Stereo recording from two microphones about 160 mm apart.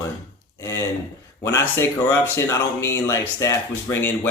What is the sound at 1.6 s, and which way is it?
Speech, 15° left (ahead or behind).